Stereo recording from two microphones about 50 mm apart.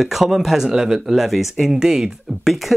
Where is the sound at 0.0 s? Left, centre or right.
Centre.